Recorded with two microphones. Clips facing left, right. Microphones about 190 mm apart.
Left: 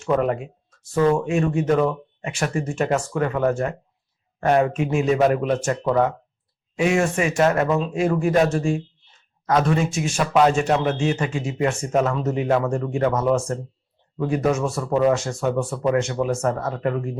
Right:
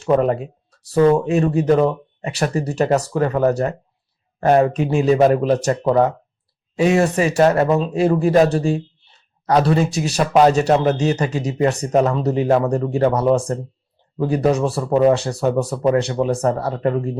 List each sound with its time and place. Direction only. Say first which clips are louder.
0.0 s speech: right 4 dB; 35° right (ahead or behind)